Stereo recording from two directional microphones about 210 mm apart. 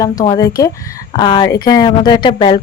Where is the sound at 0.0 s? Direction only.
15° left (ahead or behind).